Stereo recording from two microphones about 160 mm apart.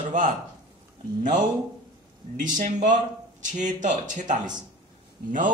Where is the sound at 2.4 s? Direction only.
55° right (ahead or behind).